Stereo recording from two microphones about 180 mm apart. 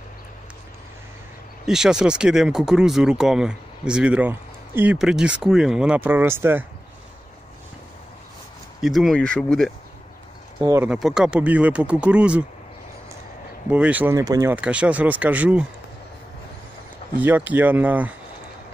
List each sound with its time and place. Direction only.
1.7 s speech: 5° right (ahead or behind)
8.8 s speech: centre (ahead or behind)
10.6 s speech: 15° right (ahead or behind)
10.9 s speech: 5° right (ahead or behind)
13.7 s speech: 10° right (ahead or behind)
14.5 s speech: 5° right (ahead or behind)
17.2 s speech: 10° right (ahead or behind)